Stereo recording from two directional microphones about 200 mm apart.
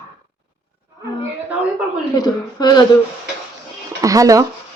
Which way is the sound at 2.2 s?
20° left (ahead or behind).